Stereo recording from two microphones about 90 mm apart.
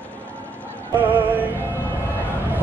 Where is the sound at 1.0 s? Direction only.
20° right (ahead or behind).